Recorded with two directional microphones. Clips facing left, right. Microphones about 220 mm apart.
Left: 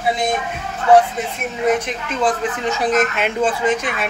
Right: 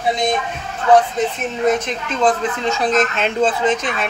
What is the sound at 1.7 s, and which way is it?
Speech, 10° left (ahead or behind).